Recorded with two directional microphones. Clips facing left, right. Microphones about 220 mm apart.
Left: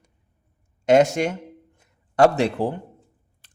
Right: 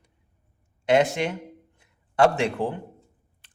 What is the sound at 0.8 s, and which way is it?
A man's voice, 45° left (ahead or behind).